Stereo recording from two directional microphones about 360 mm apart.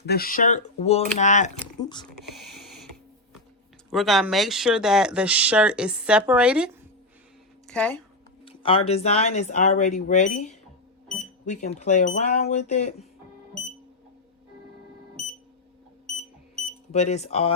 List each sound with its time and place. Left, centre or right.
0.0 s speech: left
2.3 s a sound: centre
3.8 s speech: centre
7.7 s speech: centre
8.4 s speech: centre
16.9 s speech: centre